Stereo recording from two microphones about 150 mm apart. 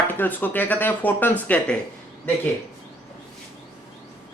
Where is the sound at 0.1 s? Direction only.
10° left (ahead or behind).